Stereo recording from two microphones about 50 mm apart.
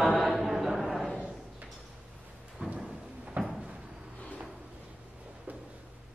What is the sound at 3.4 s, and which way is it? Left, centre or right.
Cupboard open or close, right.